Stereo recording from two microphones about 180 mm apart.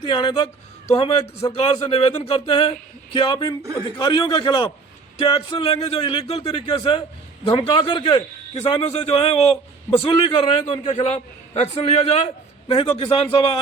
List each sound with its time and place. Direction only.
0.0 s a man's voice: 25° left (ahead or behind)